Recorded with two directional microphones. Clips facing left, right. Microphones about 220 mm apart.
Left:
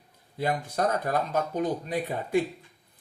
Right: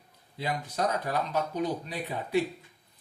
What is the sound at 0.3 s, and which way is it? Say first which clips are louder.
Speech: left 4 dB; 50° left (ahead or behind).